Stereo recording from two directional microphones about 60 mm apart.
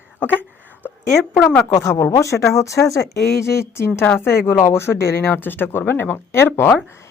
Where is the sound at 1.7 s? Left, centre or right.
Left.